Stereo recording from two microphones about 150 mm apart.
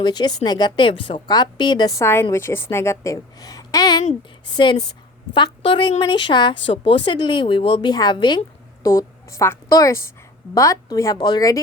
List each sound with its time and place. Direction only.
0.0 s a woman's voice: 30° left (ahead or behind)
2.3 s a woman's voice: 15° left (ahead or behind)